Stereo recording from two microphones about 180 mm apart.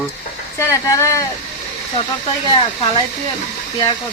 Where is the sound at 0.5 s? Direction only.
15° left (ahead or behind).